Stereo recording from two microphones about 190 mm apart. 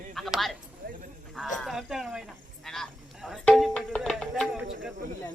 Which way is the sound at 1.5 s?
Centre (ahead or behind).